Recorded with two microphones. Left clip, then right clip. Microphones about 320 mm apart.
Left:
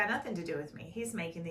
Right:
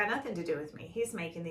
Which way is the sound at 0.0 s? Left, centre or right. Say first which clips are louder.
Right 1 dB; centre.